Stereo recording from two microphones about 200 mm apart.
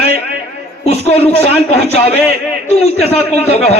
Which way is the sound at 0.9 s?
30° left (ahead or behind).